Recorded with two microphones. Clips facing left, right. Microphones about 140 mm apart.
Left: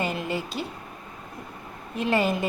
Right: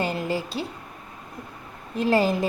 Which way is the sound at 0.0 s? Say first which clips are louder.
Right 2 dB; 35° right (ahead or behind).